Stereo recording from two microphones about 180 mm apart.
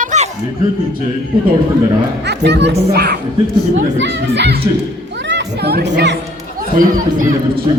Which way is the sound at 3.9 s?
85° right.